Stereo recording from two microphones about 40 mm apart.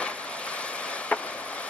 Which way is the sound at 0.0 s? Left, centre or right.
Left.